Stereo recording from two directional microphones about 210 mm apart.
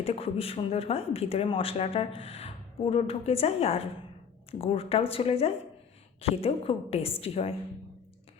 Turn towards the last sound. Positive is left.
turn(degrees=30)  # may be behind; listen again after turning